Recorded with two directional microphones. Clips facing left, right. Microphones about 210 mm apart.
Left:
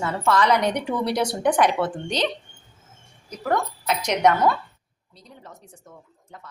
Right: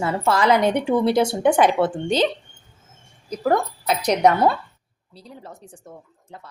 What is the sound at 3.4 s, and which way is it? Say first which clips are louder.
Speech: right 4 dB; 35° right (ahead or behind).